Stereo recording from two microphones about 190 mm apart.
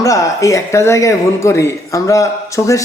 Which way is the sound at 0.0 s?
15° left (ahead or behind).